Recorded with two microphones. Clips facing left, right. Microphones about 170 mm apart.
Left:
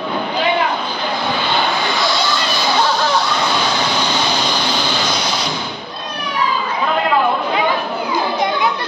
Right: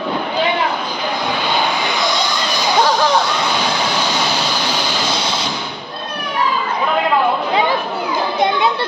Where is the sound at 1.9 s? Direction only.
20° right (ahead or behind).